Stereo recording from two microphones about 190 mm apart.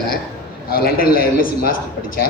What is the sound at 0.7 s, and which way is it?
A man's voice, 50° left (ahead or behind).